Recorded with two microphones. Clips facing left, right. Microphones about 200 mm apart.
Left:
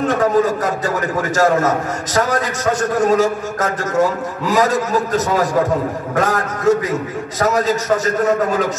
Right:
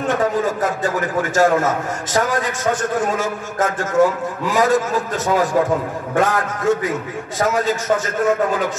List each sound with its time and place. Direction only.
0.1 s a man's voice: 40° left (ahead or behind)